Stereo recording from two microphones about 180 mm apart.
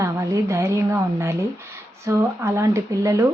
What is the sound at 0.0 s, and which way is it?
A woman's voice, 15° right (ahead or behind).